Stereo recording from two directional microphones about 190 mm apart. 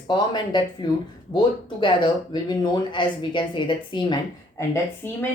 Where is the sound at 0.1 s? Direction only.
25° left (ahead or behind).